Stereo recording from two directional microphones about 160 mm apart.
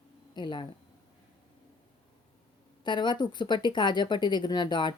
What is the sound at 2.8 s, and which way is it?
Speech, 30° left (ahead or behind).